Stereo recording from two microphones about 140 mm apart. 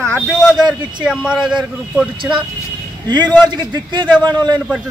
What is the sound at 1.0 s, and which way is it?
Speech, 5° right (ahead or behind).